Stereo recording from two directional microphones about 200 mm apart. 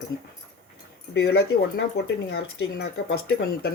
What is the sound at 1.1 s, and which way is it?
Speech, 55° left (ahead or behind).